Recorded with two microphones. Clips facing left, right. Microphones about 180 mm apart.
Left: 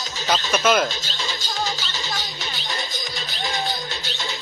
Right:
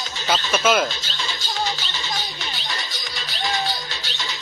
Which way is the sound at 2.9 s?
50° left (ahead or behind).